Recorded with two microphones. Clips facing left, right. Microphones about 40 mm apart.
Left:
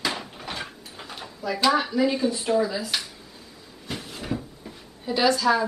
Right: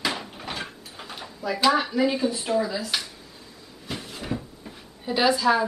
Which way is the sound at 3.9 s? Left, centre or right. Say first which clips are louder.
Even; centre.